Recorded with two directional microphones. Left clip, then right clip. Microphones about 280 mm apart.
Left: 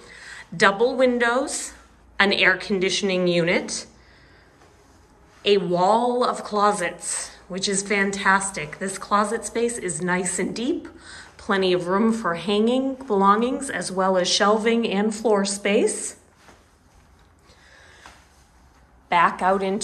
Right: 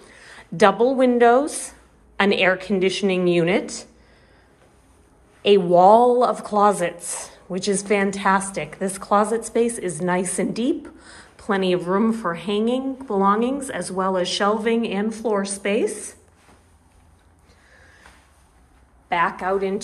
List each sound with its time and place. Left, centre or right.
0.0 s speech: centre
5.4 s a woman's voice: centre
19.0 s a woman's voice: centre